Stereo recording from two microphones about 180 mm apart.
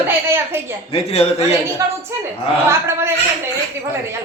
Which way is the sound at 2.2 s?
15° right (ahead or behind).